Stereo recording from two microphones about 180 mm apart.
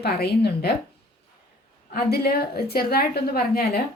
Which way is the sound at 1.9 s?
60° left (ahead or behind).